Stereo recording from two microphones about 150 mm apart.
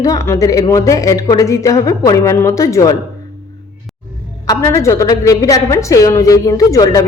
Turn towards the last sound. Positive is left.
turn(degrees=20)  # may be behind; listen again after turning